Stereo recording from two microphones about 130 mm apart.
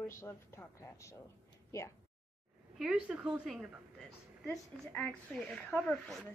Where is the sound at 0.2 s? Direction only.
20° left (ahead or behind).